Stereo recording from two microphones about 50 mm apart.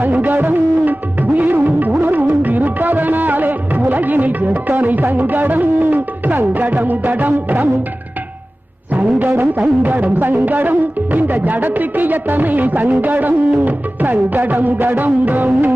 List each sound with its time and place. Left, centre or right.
0.0 s music: right
9.0 s music: right